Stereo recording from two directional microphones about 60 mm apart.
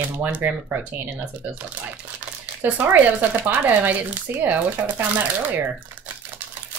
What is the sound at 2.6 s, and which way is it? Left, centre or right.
Speech, right.